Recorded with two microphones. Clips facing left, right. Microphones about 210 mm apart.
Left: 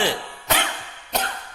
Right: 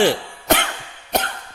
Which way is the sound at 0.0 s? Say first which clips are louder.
Right 7 dB; 55° right (ahead or behind).